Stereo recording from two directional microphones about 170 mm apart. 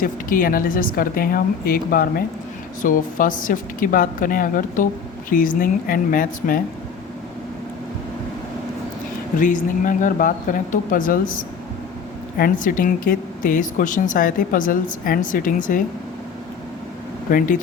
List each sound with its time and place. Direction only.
0.0 s a woman's voice: 55° left (ahead or behind)
9.4 s a woman's voice: 50° left (ahead or behind)